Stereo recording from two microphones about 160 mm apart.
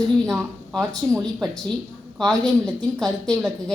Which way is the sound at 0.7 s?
5° left (ahead or behind).